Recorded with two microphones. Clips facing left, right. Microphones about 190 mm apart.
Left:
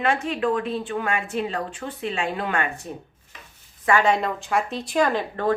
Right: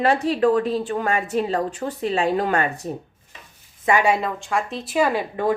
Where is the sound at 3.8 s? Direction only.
15° right (ahead or behind).